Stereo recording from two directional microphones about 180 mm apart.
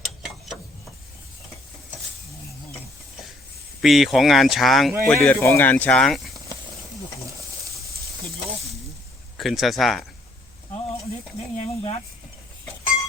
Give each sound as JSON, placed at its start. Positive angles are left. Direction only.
{"t": 3.8, "sound": "speech", "side_deg": 0}
{"t": 9.4, "sound": "speech", "side_deg": 0}
{"t": 11.5, "sound": "speech", "side_deg": 35}